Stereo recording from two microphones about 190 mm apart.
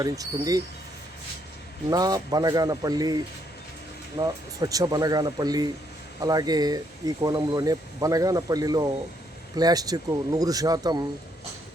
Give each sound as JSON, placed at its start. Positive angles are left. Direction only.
{"t": 0.0, "sound": "speech", "side_deg": -20}
{"t": 1.9, "sound": "speech", "side_deg": -20}
{"t": 4.2, "sound": "speech", "side_deg": -20}